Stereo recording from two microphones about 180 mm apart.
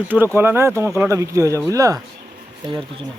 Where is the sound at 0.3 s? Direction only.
15° right (ahead or behind).